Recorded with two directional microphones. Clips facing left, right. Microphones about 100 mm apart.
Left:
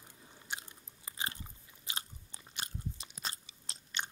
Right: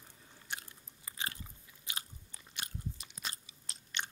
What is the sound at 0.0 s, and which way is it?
Biting, 15° left (ahead or behind).